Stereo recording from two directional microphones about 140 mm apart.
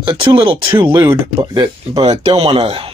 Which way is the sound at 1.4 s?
30° right (ahead or behind).